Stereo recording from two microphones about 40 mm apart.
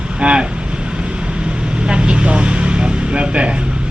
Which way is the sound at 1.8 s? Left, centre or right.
Right.